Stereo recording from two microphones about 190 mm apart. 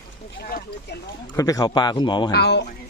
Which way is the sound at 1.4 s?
20° left (ahead or behind).